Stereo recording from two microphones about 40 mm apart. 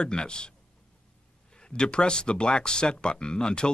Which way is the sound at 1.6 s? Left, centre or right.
Left.